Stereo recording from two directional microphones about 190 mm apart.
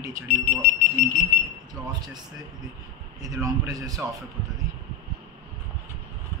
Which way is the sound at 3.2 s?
20° right (ahead or behind).